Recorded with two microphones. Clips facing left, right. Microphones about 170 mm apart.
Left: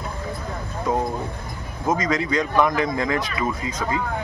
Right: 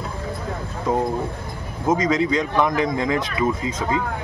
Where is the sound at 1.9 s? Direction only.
25° right (ahead or behind).